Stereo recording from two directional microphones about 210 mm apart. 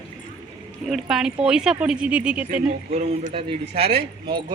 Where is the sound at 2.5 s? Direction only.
30° right (ahead or behind).